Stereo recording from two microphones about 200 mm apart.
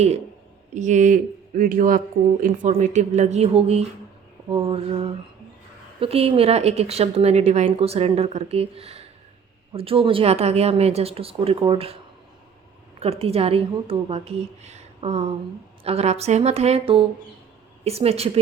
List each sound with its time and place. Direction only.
0.7 s a woman's voice: 35° right (ahead or behind)
13.0 s a woman's voice: 30° right (ahead or behind)